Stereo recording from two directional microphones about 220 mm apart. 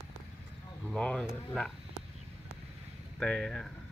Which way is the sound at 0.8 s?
5° left (ahead or behind).